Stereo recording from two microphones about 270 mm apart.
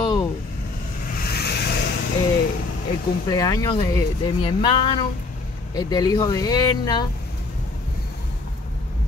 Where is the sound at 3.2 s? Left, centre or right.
Centre.